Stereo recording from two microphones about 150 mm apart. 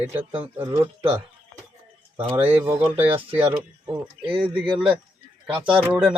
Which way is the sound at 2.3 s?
15° right (ahead or behind).